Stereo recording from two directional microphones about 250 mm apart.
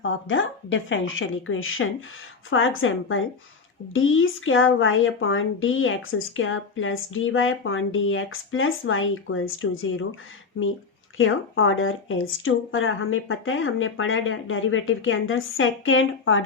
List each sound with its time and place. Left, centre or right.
0.0 s speech: left
11.2 s speech: left